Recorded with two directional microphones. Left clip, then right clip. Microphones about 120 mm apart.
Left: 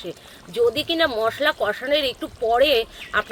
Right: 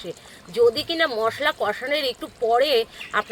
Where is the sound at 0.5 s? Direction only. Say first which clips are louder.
Right 1 dB; 30° left (ahead or behind).